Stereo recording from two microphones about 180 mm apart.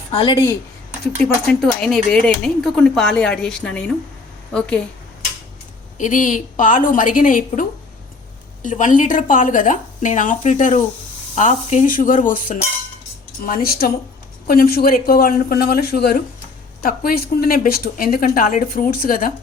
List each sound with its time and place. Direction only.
0.1 s speech: 30° left (ahead or behind)
1.5 s speech: centre (ahead or behind)
6.0 s a woman's voice: 45° left (ahead or behind)